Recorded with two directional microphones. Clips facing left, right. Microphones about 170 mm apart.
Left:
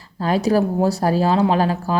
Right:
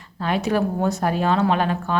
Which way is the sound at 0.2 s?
35° left (ahead or behind).